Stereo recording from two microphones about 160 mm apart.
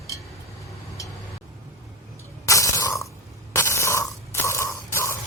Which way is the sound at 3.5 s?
15° left (ahead or behind).